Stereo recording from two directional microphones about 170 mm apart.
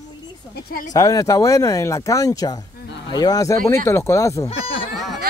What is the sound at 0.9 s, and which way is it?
Speech, 20° left (ahead or behind).